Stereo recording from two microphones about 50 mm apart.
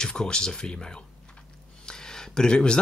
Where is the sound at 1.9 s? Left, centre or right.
Centre.